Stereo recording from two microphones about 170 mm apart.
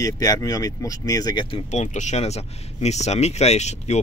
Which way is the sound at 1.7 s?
45° left (ahead or behind).